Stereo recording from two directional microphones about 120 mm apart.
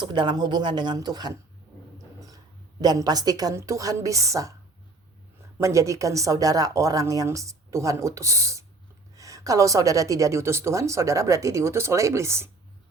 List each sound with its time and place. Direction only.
0.0 s speech: 40° right (ahead or behind)
2.8 s a woman's voice: 35° right (ahead or behind)